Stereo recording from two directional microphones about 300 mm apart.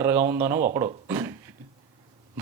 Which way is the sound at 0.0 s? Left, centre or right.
Centre.